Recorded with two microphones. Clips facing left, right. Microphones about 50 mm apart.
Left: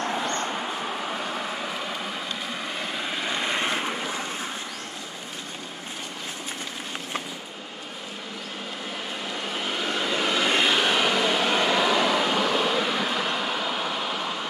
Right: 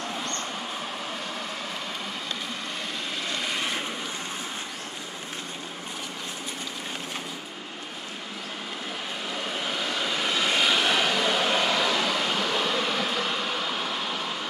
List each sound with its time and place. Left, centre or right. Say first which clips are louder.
3.2 s vehicle: left 3 dB; centre
9.9 s vehicle: left 3 dB; centre
10.7 s a sound: left 1 dB; centre